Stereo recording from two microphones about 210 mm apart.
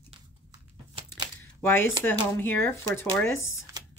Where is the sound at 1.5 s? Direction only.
10° left (ahead or behind).